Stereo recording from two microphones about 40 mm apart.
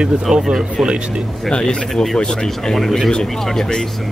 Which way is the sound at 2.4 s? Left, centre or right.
Centre.